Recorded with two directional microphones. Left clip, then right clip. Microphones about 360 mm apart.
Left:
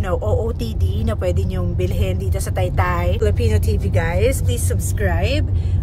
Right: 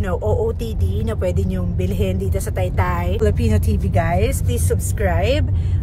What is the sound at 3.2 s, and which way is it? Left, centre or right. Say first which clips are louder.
Speech: even; centre.